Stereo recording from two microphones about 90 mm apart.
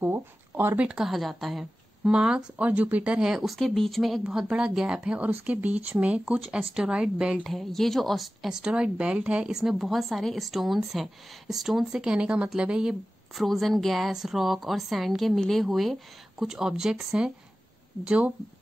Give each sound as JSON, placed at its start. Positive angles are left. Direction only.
{"t": 0.0, "sound": "speech", "side_deg": -25}
{"t": 0.7, "sound": "speech", "side_deg": -10}
{"t": 7.4, "sound": "speech", "side_deg": 5}
{"t": 13.4, "sound": "speech", "side_deg": 0}